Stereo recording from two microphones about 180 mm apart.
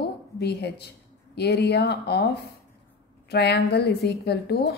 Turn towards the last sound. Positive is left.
turn(degrees=65)  # may be behind; listen again after turning